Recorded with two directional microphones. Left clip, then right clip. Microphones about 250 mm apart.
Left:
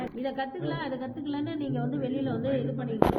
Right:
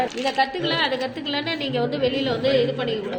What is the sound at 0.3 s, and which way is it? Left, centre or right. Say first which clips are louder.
A woman's voice: right 12 dB; right.